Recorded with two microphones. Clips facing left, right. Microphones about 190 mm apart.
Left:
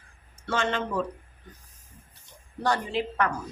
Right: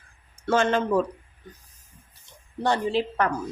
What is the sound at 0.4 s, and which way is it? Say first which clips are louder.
Speech: right 6 dB; 45° right (ahead or behind).